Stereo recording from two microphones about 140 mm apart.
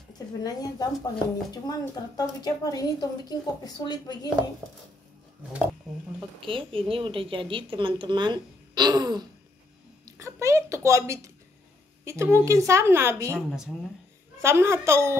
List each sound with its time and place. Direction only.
0.4 s a woman's voice: 25° left (ahead or behind)
5.9 s speech: centre (ahead or behind)
6.4 s a woman's voice: 40° right (ahead or behind); by 13.4 s 20° right (ahead or behind)
14.4 s a woman's voice: 20° right (ahead or behind)